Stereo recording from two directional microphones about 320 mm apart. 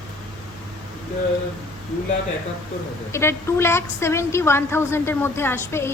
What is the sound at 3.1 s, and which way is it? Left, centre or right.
A woman's voice, centre.